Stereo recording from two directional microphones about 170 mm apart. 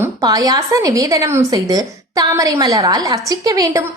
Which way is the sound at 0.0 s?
20° right (ahead or behind).